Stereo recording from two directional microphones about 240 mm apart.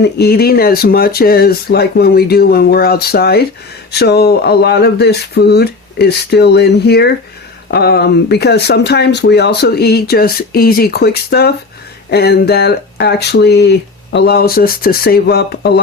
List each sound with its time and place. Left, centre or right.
0.0 s speech: left